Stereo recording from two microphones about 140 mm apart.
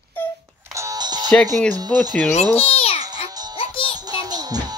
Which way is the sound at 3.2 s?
40° left (ahead or behind).